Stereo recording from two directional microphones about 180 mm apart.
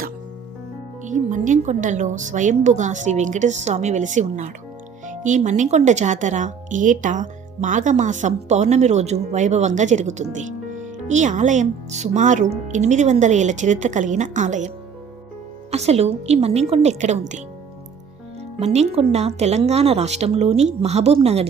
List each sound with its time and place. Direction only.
1.0 s a woman's voice: 45° right (ahead or behind)
15.7 s speech: 35° right (ahead or behind)
18.6 s speech: 40° right (ahead or behind)